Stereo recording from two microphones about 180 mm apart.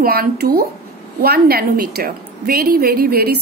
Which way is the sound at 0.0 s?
55° right (ahead or behind).